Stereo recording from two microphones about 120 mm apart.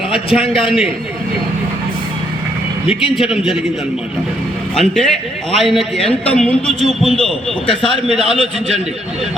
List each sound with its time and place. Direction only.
0.1 s a man's voice: centre (ahead or behind)
2.9 s a man's voice: 5° right (ahead or behind)
4.7 s a man's voice: 5° left (ahead or behind)
8.2 s a man's voice: 55° right (ahead or behind)